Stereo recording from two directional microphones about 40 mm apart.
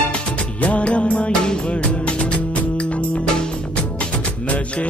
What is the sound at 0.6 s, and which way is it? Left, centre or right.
Music, left.